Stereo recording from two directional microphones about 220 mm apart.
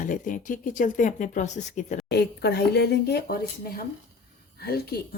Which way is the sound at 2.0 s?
50° left (ahead or behind).